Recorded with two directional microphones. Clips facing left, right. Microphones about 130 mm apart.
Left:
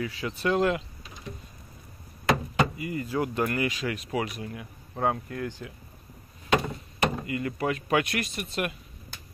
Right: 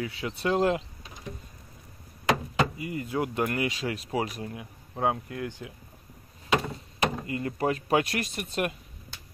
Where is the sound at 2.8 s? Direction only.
20° right (ahead or behind).